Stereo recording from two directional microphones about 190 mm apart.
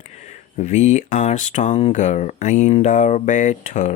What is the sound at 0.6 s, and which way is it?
Speech, 35° left (ahead or behind).